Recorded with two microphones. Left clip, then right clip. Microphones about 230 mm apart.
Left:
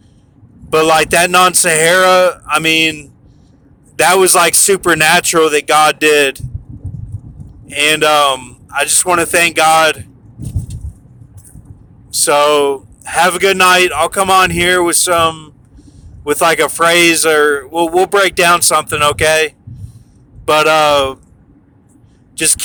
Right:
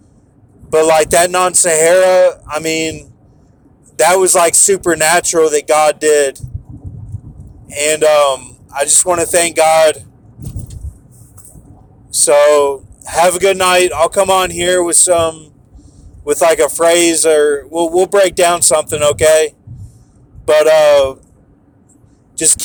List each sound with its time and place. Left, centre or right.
0.7 s speech: left
7.7 s speech: centre
12.1 s a man's voice: centre
22.4 s speech: centre